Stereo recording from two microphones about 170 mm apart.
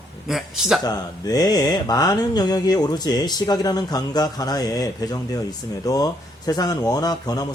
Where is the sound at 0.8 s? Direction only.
20° left (ahead or behind).